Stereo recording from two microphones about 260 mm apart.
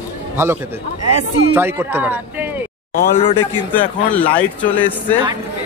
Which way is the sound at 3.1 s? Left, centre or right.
Left.